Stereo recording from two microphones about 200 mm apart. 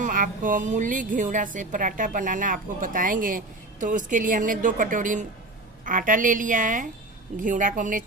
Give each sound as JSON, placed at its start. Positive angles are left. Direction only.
{"t": 0.0, "sound": "a woman's voice", "side_deg": -40}